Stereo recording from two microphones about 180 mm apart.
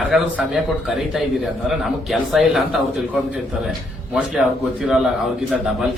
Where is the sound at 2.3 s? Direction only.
Centre (ahead or behind).